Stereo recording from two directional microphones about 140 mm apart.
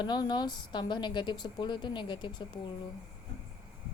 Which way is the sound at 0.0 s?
30° left (ahead or behind).